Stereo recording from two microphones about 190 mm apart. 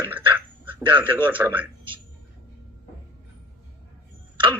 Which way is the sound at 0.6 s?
25° right (ahead or behind).